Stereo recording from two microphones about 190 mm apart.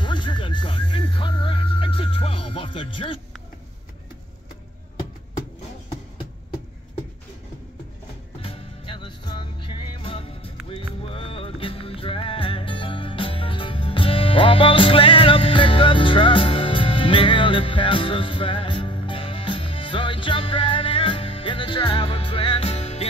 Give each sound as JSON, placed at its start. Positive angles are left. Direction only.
{"t": 0.0, "sound": "music", "side_deg": 25}
{"t": 8.4, "sound": "music", "side_deg": 30}